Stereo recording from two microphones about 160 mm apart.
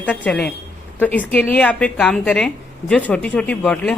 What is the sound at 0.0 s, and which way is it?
Speech, 5° left (ahead or behind).